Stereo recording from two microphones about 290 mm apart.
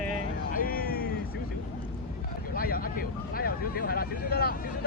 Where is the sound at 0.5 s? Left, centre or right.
Left.